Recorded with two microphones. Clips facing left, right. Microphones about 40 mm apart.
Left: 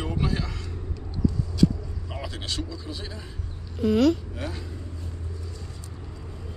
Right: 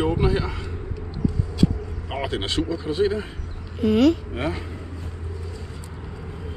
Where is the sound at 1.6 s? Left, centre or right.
Right.